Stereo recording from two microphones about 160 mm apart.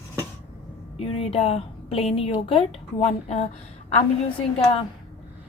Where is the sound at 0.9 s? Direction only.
40° left (ahead or behind).